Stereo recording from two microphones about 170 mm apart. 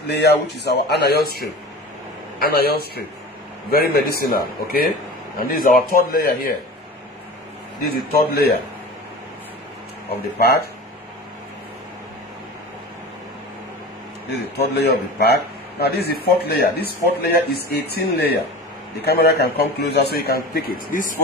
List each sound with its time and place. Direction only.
0.1 s a man's voice: 75° left (ahead or behind)
7.9 s a man's voice: 65° left (ahead or behind)
10.1 s a man's voice: 65° left (ahead or behind)
14.8 s a man's voice: 70° left (ahead or behind); by 21.2 s 50° left (ahead or behind)